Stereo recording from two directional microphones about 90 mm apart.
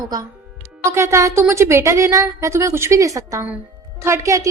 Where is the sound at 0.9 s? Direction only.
30° right (ahead or behind).